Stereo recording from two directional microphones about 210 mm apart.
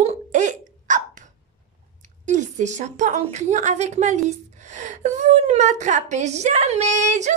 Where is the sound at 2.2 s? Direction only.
35° right (ahead or behind).